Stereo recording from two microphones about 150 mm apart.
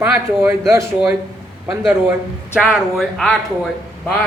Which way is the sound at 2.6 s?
Centre (ahead or behind).